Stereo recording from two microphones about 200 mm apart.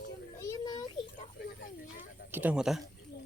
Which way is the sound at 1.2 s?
40° left (ahead or behind).